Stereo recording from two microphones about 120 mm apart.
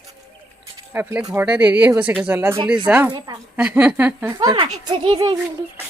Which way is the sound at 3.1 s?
30° right (ahead or behind).